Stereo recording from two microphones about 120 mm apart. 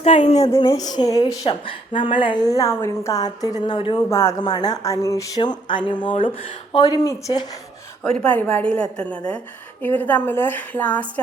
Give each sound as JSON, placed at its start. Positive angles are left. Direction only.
{"t": 0.0, "sound": "a sound", "side_deg": 60}
{"t": 0.7, "sound": "a woman's voice", "side_deg": 30}
{"t": 1.5, "sound": "a woman's voice", "side_deg": 45}
{"t": 3.7, "sound": "speech", "side_deg": 45}
{"t": 4.1, "sound": "speech", "side_deg": 25}
{"t": 4.4, "sound": "a woman's voice", "side_deg": 35}
{"t": 6.7, "sound": "a woman's voice", "side_deg": 35}
{"t": 8.1, "sound": "a woman's voice", "side_deg": 10}